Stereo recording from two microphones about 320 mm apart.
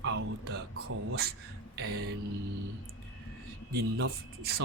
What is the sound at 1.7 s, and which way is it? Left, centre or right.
Music, right.